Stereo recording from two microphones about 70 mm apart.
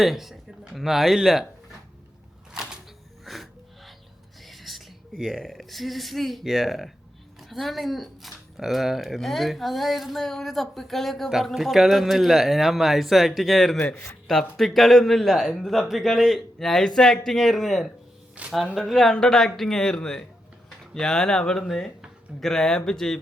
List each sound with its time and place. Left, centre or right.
0.0 s speech: centre
2.5 s a sound: centre
3.2 s music: centre
4.4 s a woman's voice: centre
18.4 s speech: centre
18.8 s speech: centre